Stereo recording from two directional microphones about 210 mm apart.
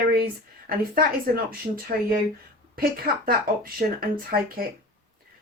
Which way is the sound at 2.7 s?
45° right (ahead or behind).